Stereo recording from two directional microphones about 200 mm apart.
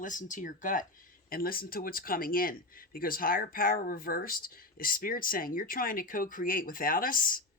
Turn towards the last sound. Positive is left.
turn(degrees=45)  # may be behind; listen again after turning